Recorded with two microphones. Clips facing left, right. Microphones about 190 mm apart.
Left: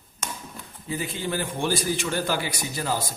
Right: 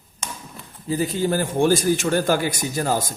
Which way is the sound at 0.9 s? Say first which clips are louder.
Right 8 dB; 40° right (ahead or behind).